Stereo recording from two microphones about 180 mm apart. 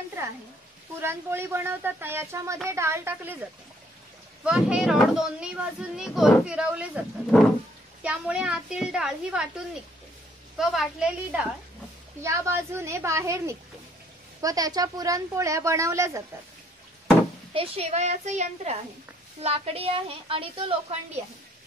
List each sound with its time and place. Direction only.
1.0 s speech: 15° right (ahead or behind)
4.5 s speech: 5° right (ahead or behind)
10.6 s speech: centre (ahead or behind)
12.2 s speech: 15° right (ahead or behind)
17.6 s a woman's voice: 35° right (ahead or behind)